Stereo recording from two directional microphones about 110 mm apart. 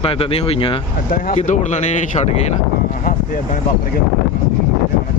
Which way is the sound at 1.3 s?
90° left.